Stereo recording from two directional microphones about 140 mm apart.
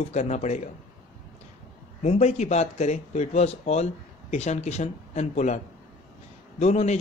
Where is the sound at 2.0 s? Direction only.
55° left (ahead or behind).